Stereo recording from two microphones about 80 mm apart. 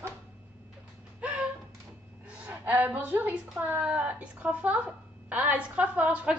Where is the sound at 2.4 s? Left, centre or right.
Right.